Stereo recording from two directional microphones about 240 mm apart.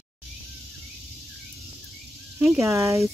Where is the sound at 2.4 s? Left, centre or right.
Centre.